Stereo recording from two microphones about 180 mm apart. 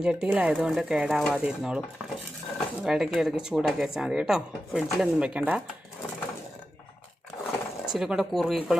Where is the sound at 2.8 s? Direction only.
5° right (ahead or behind).